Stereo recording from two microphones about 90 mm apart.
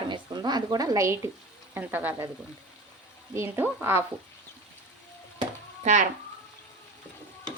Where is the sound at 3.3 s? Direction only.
30° right (ahead or behind).